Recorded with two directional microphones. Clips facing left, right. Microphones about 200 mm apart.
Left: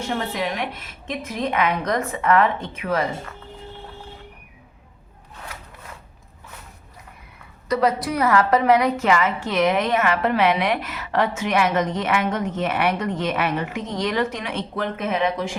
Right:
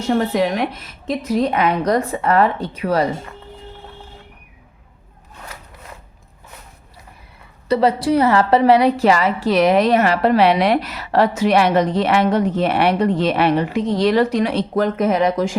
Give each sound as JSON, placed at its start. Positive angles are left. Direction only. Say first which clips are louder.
{"t": 0.1, "sound": "a woman's voice", "louder": "right 10 dB", "side_deg": -45}
{"t": 7.7, "sound": "a woman's voice", "louder": "right 5 dB", "side_deg": -30}